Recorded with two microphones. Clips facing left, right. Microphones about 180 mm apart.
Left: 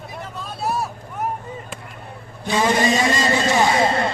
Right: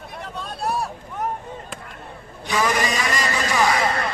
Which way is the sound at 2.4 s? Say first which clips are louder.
Left 4 dB; 25° left (ahead or behind).